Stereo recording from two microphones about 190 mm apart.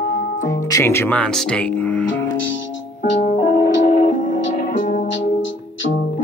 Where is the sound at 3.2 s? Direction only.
40° left (ahead or behind).